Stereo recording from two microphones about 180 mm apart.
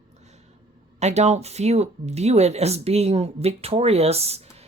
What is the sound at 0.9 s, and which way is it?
Speech, 40° right (ahead or behind).